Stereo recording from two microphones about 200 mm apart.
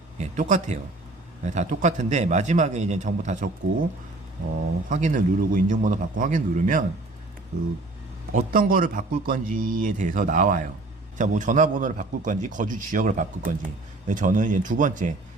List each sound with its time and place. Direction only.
0.2 s a man's voice: 40° right (ahead or behind)
4.9 s a man's voice: 40° right (ahead or behind)
8.3 s a man's voice: 45° right (ahead or behind)